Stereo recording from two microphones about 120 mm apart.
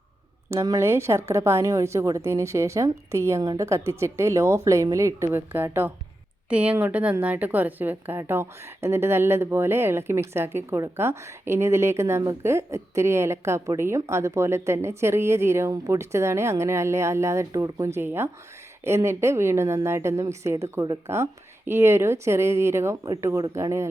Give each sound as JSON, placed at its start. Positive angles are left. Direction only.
{"t": 0.5, "sound": "a woman's voice", "side_deg": -25}